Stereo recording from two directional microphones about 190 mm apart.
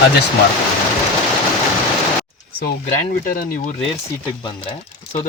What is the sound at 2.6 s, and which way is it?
Speech, 45° left (ahead or behind).